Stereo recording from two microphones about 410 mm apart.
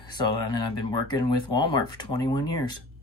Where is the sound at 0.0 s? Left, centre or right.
Left.